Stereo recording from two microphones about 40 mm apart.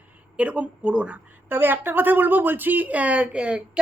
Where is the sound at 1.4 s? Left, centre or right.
Right.